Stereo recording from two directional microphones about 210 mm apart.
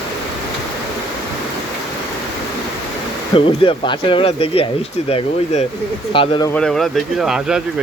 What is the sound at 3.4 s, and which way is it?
Speech, 25° left (ahead or behind).